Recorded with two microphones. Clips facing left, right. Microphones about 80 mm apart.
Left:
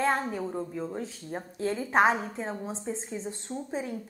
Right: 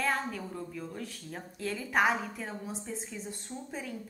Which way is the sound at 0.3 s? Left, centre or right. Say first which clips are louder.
Left 6 dB; left.